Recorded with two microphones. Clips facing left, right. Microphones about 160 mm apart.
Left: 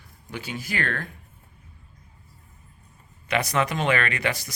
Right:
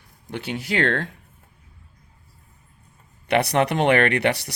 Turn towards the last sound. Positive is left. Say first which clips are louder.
# right 7 dB
turn(degrees=-65)  # may be behind; listen again after turning